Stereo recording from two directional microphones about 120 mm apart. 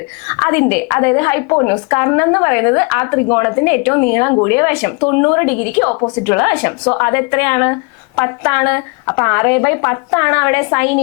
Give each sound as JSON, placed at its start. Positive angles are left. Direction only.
{"t": 0.3, "sound": "a woman's voice", "side_deg": 25}